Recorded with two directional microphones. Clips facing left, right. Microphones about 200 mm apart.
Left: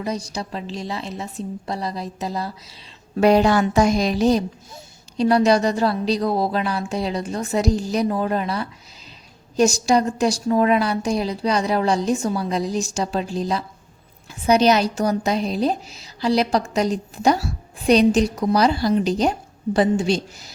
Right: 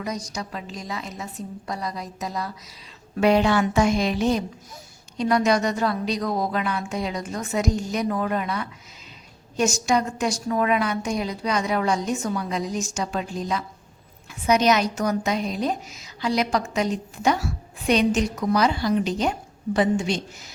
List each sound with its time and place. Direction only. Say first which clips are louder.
0.0 s a woman's voice: left 4 dB; 30° left (ahead or behind)